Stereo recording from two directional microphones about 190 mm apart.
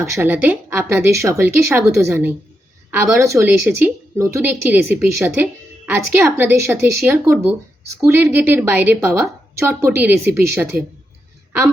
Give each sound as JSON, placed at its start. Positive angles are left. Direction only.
{"t": 0.0, "sound": "a woman's voice", "side_deg": -10}